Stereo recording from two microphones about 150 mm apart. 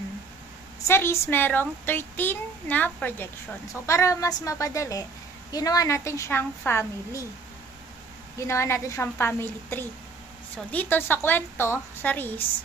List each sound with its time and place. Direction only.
0.9 s a child's voice: 15° left (ahead or behind)
8.4 s a child's voice: 20° left (ahead or behind)